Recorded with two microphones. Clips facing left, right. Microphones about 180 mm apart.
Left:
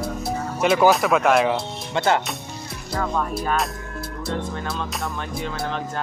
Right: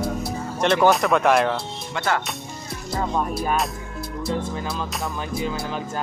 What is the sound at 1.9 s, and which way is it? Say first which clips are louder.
Speech: left 4 dB; 25° left (ahead or behind).